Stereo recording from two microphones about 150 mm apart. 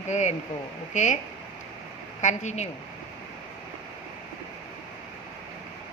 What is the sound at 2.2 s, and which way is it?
Speech, 50° left (ahead or behind).